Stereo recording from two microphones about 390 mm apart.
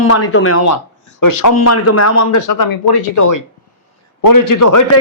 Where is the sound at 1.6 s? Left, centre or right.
Left.